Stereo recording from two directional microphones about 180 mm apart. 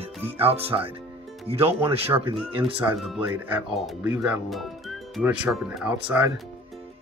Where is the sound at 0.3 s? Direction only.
35° right (ahead or behind).